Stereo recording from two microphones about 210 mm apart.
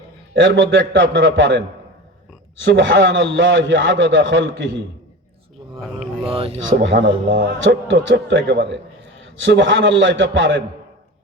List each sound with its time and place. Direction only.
0.3 s a man's voice: 60° right (ahead or behind)
6.2 s speech: 25° right (ahead or behind)
6.7 s a man's voice: 55° right (ahead or behind)